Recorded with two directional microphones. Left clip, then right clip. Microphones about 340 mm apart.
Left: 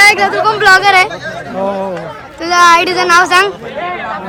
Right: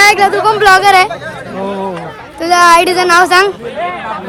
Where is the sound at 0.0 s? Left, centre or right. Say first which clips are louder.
Even; centre.